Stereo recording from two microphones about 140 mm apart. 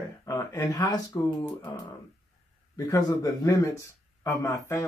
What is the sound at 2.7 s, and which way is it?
Speech, 25° left (ahead or behind).